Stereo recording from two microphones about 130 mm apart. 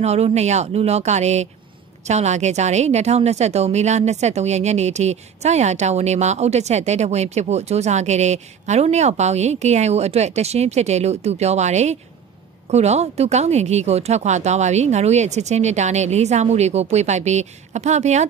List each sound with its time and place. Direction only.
0.0 s a woman's voice: 55° right (ahead or behind)